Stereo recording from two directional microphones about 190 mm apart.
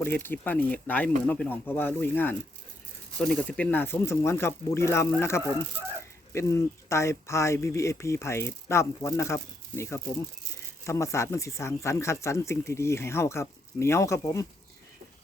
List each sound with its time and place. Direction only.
0.0 s speech: 10° left (ahead or behind)